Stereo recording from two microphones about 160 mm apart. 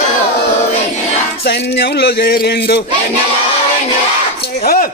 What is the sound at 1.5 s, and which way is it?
Music, 90° left.